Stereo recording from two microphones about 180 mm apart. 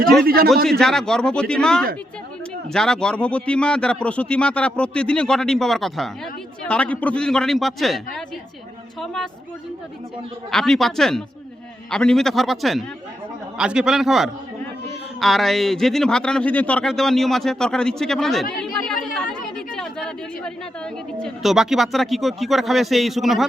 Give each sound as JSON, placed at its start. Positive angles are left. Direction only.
{"t": 0.4, "sound": "speech", "side_deg": 0}
{"t": 10.5, "sound": "speech", "side_deg": 5}